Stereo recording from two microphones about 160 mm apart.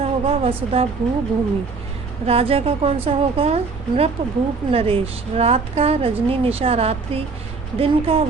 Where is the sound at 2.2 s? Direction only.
40° right (ahead or behind).